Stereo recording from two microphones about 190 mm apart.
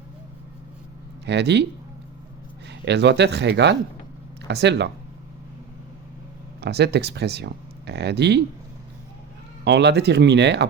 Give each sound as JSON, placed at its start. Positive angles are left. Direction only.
{"t": 1.2, "sound": "speech", "side_deg": -65}
{"t": 2.6, "sound": "speech", "side_deg": -65}
{"t": 6.6, "sound": "speech", "side_deg": -60}
{"t": 9.6, "sound": "speech", "side_deg": -65}